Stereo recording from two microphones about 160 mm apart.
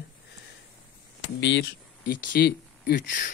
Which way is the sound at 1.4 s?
90° left.